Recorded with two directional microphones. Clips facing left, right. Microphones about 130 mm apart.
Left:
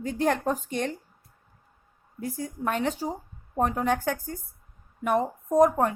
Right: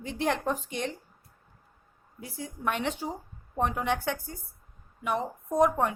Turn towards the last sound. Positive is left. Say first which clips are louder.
# left 4 dB
turn(degrees=40)  # may be behind; listen again after turning